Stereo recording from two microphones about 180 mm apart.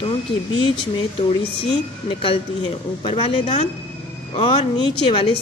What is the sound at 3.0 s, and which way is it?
A woman's voice, 30° left (ahead or behind).